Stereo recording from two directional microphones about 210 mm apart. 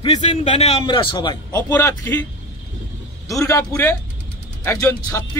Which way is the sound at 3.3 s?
15° left (ahead or behind).